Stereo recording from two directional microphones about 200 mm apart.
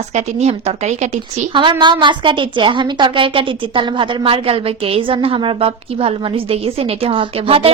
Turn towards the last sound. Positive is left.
turn(degrees=-25)  # may be behind; listen again after turning